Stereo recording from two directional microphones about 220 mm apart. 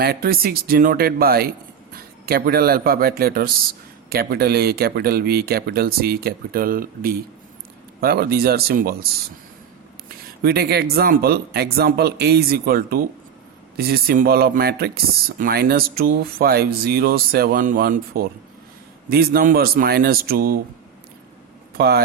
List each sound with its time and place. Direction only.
0.0 s speech: 45° right (ahead or behind)
10.4 s speech: 45° right (ahead or behind)
21.8 s speech: 45° right (ahead or behind)